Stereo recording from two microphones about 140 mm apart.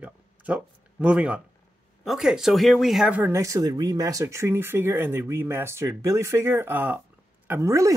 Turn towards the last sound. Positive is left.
turn(degrees=-20)  # may be behind; listen again after turning